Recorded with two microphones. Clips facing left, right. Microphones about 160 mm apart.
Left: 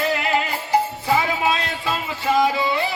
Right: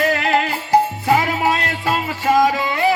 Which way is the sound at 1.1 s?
80° right.